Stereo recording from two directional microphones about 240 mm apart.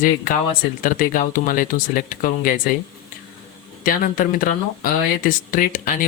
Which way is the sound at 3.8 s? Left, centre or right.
Left.